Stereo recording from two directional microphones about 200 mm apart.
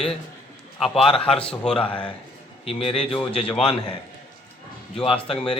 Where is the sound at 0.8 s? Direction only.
Centre (ahead or behind).